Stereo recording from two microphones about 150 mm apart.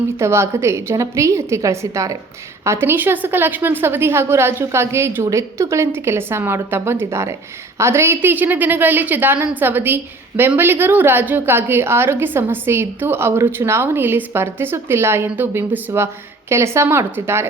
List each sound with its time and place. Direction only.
0.2 s a woman's voice: 20° right (ahead or behind)